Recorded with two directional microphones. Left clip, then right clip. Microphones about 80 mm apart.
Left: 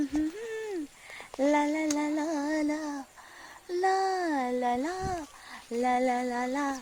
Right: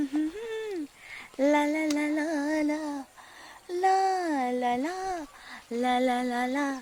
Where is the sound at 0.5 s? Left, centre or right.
Right.